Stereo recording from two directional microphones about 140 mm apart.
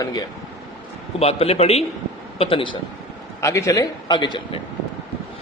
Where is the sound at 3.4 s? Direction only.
20° left (ahead or behind).